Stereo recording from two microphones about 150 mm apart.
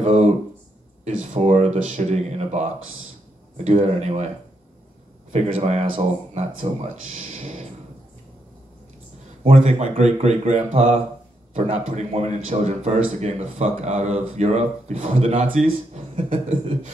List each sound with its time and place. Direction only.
0.0 s speech: 45° right (ahead or behind)
3.6 s speech: 45° right (ahead or behind)
5.3 s speech: 45° right (ahead or behind)
7.2 s a sound: 60° right (ahead or behind)
9.4 s speech: 45° right (ahead or behind)
15.5 s speech: 50° right (ahead or behind)